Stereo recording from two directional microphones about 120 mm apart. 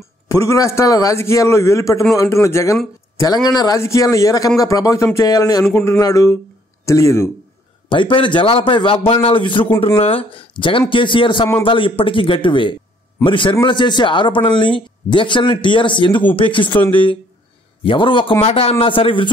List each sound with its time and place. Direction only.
0.3 s a man's voice: 25° left (ahead or behind)
7.9 s a man's voice: 45° left (ahead or behind)
18.4 s a man's voice: 55° left (ahead or behind)